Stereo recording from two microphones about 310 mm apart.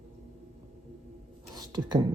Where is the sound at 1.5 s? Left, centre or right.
Centre.